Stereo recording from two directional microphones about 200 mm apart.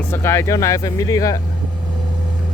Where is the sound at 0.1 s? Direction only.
10° left (ahead or behind).